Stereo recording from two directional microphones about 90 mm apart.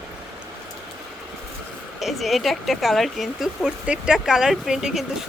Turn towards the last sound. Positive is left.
turn(degrees=-5)  # may be behind; listen again after turning